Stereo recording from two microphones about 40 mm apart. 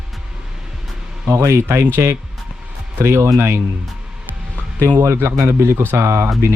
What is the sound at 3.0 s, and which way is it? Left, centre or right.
Speech, right.